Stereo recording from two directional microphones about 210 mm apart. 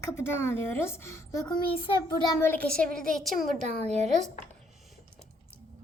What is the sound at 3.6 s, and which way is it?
Speech, 30° right (ahead or behind).